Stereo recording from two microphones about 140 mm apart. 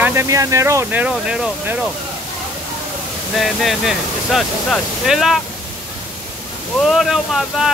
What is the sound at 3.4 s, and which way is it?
Speech, centre (ahead or behind).